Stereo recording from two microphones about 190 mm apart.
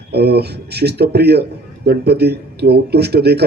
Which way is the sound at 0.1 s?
60° right (ahead or behind).